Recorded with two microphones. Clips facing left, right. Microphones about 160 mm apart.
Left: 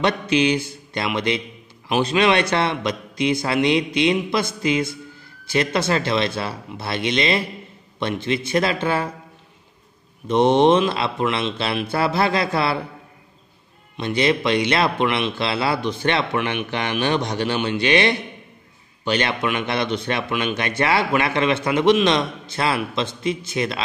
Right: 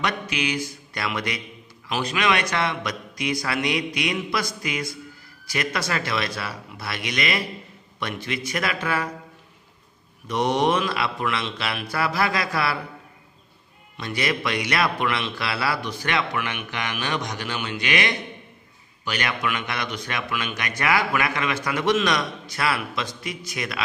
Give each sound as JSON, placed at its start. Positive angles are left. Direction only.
{"t": 0.0, "sound": "speech", "side_deg": 30}
{"t": 10.2, "sound": "speech", "side_deg": 25}
{"t": 13.9, "sound": "speech", "side_deg": 25}